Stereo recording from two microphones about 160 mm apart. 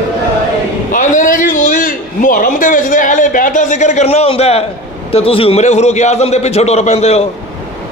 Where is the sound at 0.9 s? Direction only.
55° left (ahead or behind).